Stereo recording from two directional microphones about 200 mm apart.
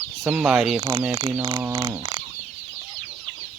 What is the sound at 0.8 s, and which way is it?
Speech, 15° right (ahead or behind).